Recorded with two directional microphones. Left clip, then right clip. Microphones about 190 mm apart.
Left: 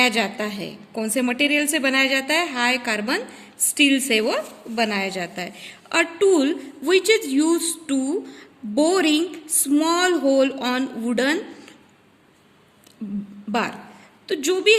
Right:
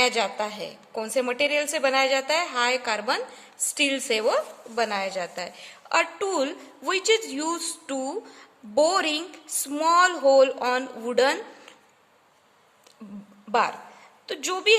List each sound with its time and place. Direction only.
0.0 s a woman's voice: 50° right (ahead or behind)
13.0 s a woman's voice: 45° right (ahead or behind)